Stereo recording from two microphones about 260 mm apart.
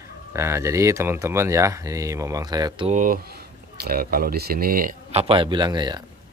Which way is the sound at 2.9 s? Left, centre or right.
Right.